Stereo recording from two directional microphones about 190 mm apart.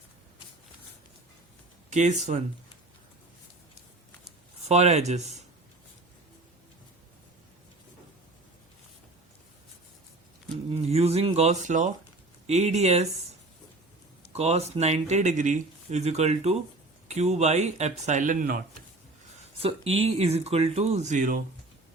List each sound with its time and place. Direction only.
1.9 s speech: 40° right (ahead or behind)
4.6 s speech: 35° right (ahead or behind)
10.8 s speech: 35° right (ahead or behind)
14.3 s speech: 35° right (ahead or behind)
19.4 s speech: 30° right (ahead or behind)